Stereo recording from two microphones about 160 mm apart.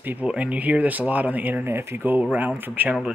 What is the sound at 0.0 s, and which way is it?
Speech, 10° right (ahead or behind).